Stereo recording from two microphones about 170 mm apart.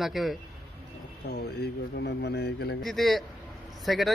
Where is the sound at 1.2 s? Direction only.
75° left (ahead or behind).